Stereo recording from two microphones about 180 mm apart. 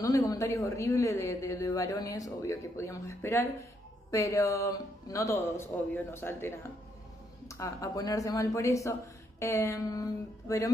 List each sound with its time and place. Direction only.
0.0 s a man's voice: 20° left (ahead or behind)